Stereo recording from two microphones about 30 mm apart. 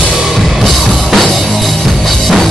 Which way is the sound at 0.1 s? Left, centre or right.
Centre.